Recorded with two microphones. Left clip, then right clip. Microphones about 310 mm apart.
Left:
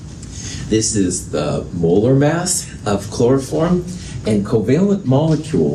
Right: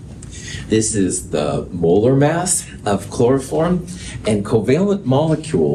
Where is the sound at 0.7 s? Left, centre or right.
Right.